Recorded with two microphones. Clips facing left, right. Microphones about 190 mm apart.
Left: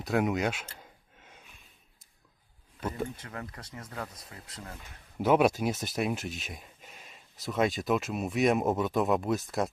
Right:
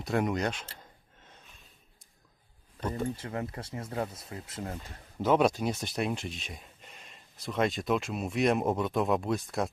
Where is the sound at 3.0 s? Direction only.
30° right (ahead or behind).